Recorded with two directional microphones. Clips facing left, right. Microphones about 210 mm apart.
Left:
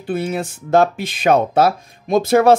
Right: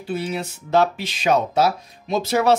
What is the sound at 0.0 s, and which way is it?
Speech, 50° left (ahead or behind).